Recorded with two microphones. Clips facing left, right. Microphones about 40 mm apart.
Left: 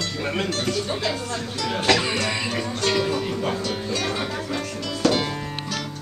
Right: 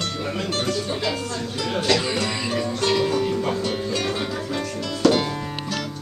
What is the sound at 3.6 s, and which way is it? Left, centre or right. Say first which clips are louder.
Speech: right 1 dB; centre.